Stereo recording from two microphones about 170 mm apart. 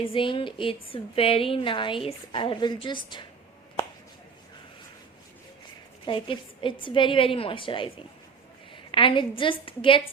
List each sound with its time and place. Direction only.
0.0 s a woman's voice: 30° left (ahead or behind)
6.1 s a woman's voice: 30° left (ahead or behind)